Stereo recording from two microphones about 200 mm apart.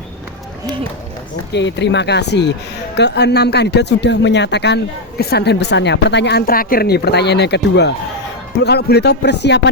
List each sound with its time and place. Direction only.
1.5 s speech: 60° left (ahead or behind)